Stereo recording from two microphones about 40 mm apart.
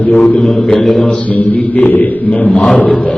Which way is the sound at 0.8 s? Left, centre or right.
Centre.